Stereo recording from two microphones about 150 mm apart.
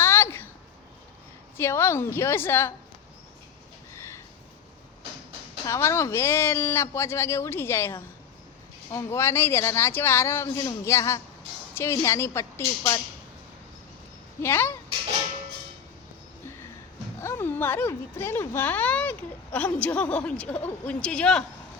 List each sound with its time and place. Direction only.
0.0 s a sound: 15° left (ahead or behind)
1.5 s speech: 15° left (ahead or behind)
5.6 s speech: 20° left (ahead or behind)
14.4 s speech: 15° left (ahead or behind)
17.2 s speech: 15° left (ahead or behind)